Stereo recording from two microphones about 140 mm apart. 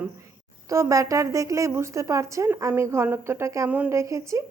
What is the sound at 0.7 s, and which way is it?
Speech, 25° right (ahead or behind).